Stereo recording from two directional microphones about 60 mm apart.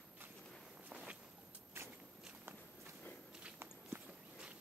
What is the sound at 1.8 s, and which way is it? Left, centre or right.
Walk, right.